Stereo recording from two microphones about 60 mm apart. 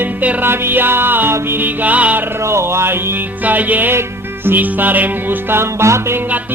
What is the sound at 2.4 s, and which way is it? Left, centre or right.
Music, right.